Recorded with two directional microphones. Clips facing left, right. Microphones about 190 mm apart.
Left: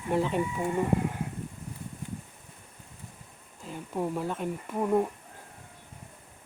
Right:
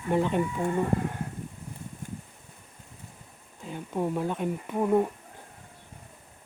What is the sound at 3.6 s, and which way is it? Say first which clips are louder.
Speech: right 2 dB; centre (ahead or behind).